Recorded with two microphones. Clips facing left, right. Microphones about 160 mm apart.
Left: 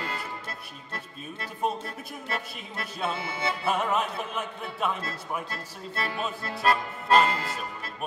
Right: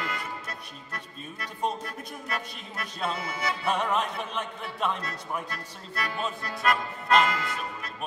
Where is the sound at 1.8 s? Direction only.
30° left (ahead or behind).